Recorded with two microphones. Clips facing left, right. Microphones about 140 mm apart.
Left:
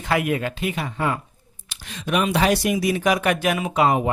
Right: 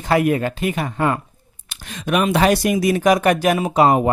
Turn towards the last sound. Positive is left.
turn(degrees=-40)  # may be behind; listen again after turning